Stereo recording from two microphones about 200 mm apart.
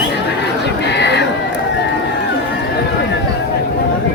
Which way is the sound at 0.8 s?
60° left (ahead or behind).